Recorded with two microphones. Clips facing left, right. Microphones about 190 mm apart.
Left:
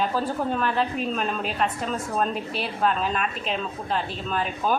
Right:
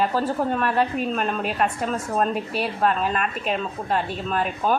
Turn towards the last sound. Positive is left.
turn(degrees=0)  # may be behind; listen again after turning